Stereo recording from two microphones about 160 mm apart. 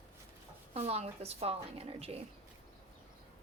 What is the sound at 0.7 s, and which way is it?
Speech, 40° right (ahead or behind).